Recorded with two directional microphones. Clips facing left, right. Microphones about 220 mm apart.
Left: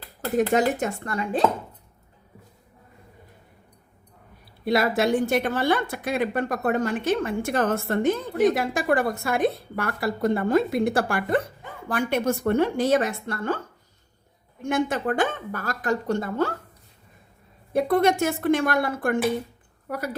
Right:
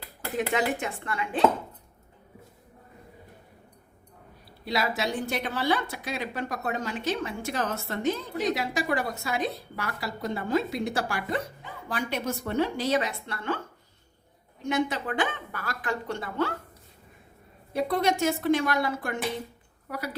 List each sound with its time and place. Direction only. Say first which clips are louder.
0.3 s speech: left 6 dB; 45° left (ahead or behind)
4.6 s a woman's voice: left 7 dB; 55° left (ahead or behind)
14.6 s a woman's voice: left 3 dB; 50° left (ahead or behind)
17.7 s a woman's voice: left 5 dB; 50° left (ahead or behind)